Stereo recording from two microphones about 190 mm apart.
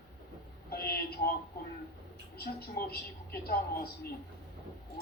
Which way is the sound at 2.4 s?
55° left (ahead or behind).